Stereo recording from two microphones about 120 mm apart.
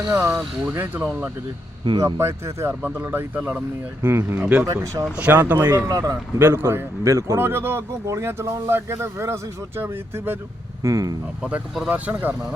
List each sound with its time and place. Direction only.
0.1 s speech: 20° right (ahead or behind)
4.6 s speech: 25° right (ahead or behind)
5.1 s speech: 15° right (ahead or behind)
5.9 s speech: 30° right (ahead or behind)
6.4 s speech: 20° right (ahead or behind)
11.4 s speech: 5° right (ahead or behind)